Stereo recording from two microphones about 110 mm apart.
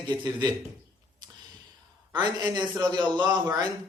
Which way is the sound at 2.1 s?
40° right (ahead or behind).